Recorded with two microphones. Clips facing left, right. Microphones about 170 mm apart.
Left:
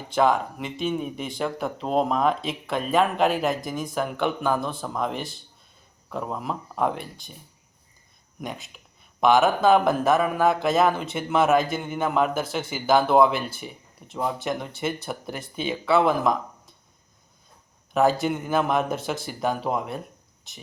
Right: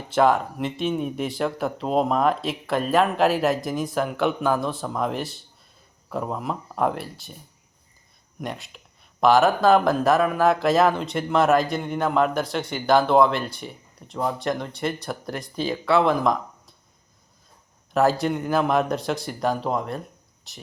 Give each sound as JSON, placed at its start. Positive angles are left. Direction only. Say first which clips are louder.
{"t": 0.1, "sound": "speech", "louder": "right 2 dB", "side_deg": 0}
{"t": 8.4, "sound": "speech", "louder": "right 2 dB", "side_deg": 0}
{"t": 17.9, "sound": "speech", "louder": "right 1 dB", "side_deg": 0}